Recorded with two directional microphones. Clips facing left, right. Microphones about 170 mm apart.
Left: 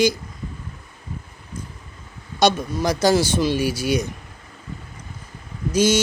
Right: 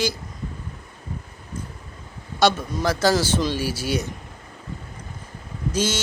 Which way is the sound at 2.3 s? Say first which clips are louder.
Left 1 dB; 15° left (ahead or behind).